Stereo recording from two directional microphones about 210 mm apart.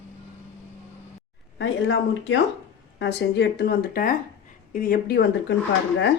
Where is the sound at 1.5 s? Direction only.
60° left (ahead or behind).